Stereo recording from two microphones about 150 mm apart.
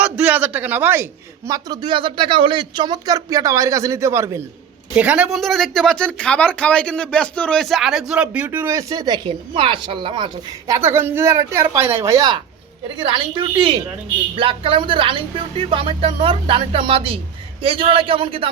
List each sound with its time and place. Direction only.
0.0 s speech: 10° right (ahead or behind)
1.5 s speech: 25° right (ahead or behind)
4.9 s speech: 10° right (ahead or behind); by 10.8 s 30° right (ahead or behind)
10.8 s speech: 15° right (ahead or behind)
13.0 s speech: 35° right (ahead or behind)